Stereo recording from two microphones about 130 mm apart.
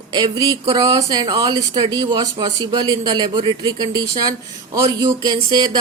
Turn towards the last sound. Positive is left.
turn(degrees=-30)  # may be behind; listen again after turning